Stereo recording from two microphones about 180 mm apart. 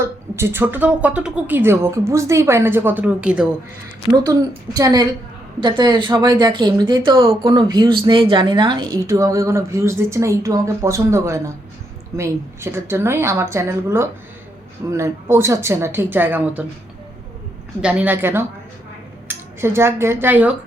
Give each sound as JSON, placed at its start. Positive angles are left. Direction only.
{"t": 0.0, "sound": "a woman's voice", "side_deg": -15}
{"t": 4.1, "sound": "a woman's voice", "side_deg": -20}
{"t": 17.7, "sound": "a woman's voice", "side_deg": -5}